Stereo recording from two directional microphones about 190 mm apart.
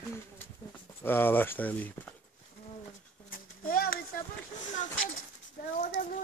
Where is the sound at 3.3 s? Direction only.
50° left (ahead or behind).